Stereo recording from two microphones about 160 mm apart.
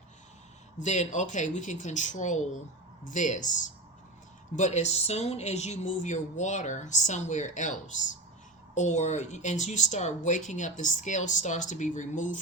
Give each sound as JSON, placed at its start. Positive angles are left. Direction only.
{"t": 0.8, "sound": "speech", "side_deg": 50}